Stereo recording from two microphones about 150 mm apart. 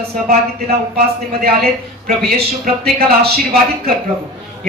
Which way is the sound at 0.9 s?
90° right.